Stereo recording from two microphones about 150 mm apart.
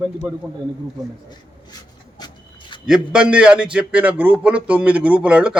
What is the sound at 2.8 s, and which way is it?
A man's voice, 5° right (ahead or behind).